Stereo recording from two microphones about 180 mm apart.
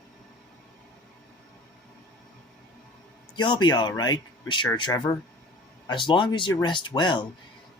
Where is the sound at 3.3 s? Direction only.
25° left (ahead or behind).